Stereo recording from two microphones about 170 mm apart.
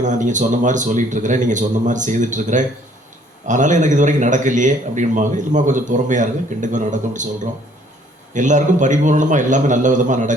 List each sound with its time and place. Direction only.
0.0 s a man's voice: 45° right (ahead or behind)
8.3 s a man's voice: 45° right (ahead or behind)